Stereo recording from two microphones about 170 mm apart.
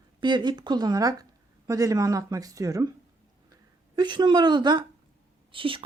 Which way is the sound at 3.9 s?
25° right (ahead or behind).